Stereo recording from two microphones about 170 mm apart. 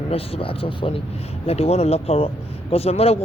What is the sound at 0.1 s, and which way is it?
Speech, 35° left (ahead or behind).